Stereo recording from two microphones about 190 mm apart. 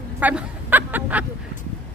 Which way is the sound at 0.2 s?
10° right (ahead or behind).